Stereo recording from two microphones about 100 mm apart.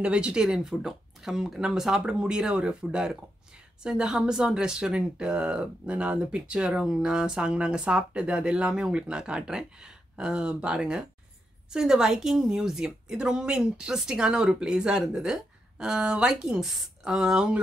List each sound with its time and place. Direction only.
0.0 s a woman's voice: 10° right (ahead or behind)